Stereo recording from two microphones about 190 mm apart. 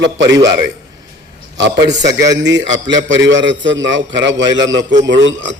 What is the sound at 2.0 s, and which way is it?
A man's voice, 65° right (ahead or behind).